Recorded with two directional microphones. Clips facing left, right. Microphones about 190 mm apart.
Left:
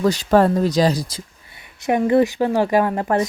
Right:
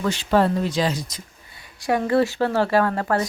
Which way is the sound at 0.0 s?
40° left (ahead or behind).